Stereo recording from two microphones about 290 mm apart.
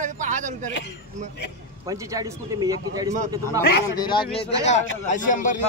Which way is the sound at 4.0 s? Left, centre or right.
Centre.